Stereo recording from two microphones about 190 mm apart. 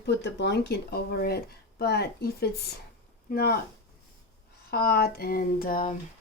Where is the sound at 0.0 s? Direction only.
65° left (ahead or behind).